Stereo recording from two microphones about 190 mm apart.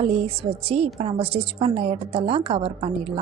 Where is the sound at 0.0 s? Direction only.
30° right (ahead or behind).